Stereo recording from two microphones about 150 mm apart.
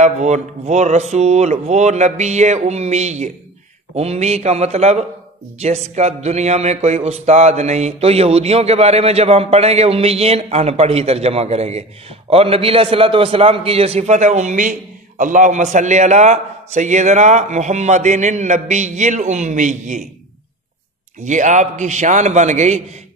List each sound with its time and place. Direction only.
0.0 s a man's voice: 50° right (ahead or behind)
21.2 s a man's voice: 55° right (ahead or behind)